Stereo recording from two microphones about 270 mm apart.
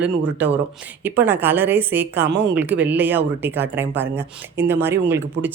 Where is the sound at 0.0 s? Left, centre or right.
Centre.